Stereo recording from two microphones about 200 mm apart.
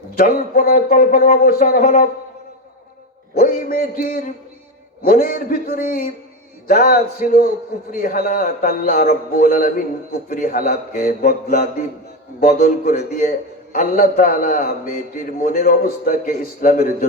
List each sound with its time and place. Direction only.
0.2 s a man's voice: 45° left (ahead or behind)
3.3 s a man's voice: 45° left (ahead or behind)